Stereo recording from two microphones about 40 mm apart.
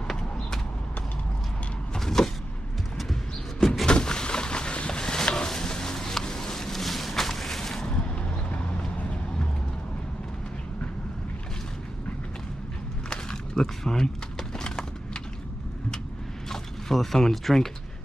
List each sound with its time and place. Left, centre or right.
2.0 s power windows: centre
3.0 s vehicle: centre
3.8 s a sound: left
13.6 s speech: centre
16.4 s mechanisms: centre